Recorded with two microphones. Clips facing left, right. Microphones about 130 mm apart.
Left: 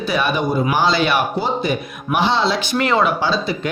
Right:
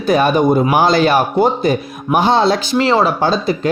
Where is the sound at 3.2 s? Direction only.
45° right (ahead or behind).